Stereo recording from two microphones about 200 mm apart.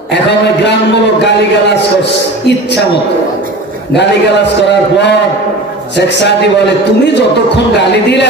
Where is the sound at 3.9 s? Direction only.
60° left (ahead or behind).